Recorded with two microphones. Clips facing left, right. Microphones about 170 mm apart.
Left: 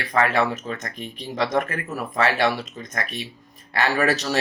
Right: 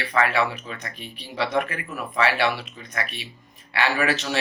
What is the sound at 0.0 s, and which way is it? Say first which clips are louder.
Speech: left 2 dB; 45° left (ahead or behind).